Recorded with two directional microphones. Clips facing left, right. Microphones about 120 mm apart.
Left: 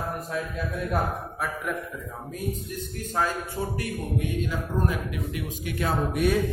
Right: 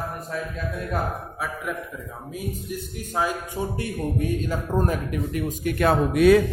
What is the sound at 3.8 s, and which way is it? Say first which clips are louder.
A man's voice: right 3 dB; 40° right (ahead or behind).